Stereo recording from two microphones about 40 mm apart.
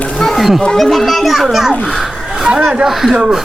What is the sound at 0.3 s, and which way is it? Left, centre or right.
Children playing, centre.